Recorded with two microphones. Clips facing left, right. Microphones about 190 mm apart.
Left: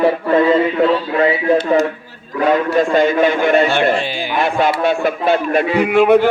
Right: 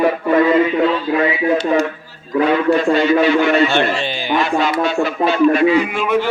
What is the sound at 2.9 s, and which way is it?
Speech, 50° left (ahead or behind).